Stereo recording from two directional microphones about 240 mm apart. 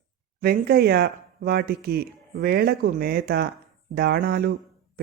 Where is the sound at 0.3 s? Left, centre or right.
Right.